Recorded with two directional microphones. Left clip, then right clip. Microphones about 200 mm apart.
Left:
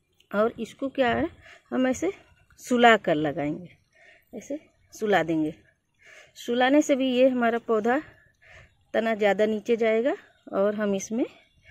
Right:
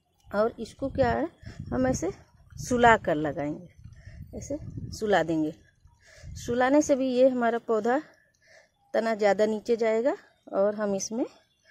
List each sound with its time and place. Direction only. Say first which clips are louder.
0.3 s a woman's voice: left 2 dB; 15° left (ahead or behind)